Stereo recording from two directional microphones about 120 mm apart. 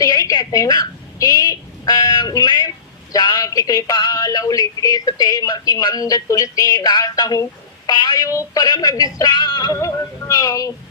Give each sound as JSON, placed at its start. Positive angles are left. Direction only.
{"t": 0.0, "sound": "a woman's voice", "side_deg": 30}